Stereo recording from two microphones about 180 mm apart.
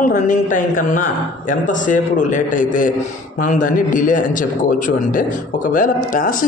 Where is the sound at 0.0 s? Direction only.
45° left (ahead or behind).